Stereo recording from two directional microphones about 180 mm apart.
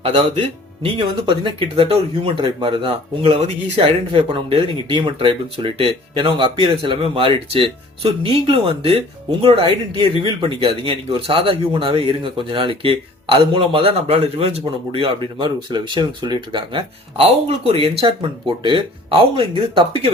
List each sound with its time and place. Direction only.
0.0 s speech: 30° right (ahead or behind)